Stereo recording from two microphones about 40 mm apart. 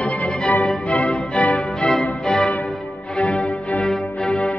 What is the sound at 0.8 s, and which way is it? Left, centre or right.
Music, left.